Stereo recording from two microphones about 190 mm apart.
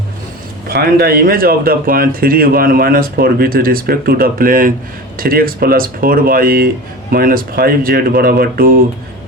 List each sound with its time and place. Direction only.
0.7 s speech: 55° right (ahead or behind)